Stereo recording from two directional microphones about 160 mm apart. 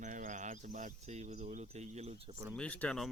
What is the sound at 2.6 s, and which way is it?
Speech, 5° left (ahead or behind).